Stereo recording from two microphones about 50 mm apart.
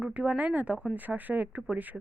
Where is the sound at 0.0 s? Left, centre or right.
Right.